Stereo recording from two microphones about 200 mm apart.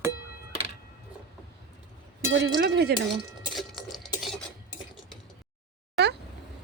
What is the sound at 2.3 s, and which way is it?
Speech, 60° right (ahead or behind).